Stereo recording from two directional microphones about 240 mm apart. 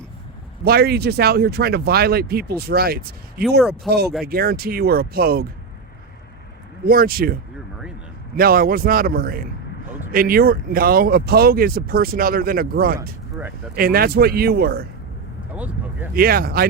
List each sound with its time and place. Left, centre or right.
0.6 s speech: right
6.8 s speech: right
8.4 s speech: right
15.5 s vehicle: centre
16.1 s speech: right